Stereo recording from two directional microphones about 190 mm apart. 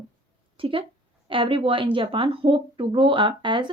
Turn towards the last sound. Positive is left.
turn(degrees=-25)  # may be behind; listen again after turning